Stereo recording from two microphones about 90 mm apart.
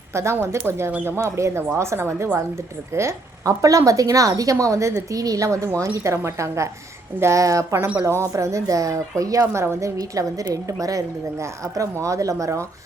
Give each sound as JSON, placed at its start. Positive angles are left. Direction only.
{"t": 0.1, "sound": "a woman's voice", "side_deg": -30}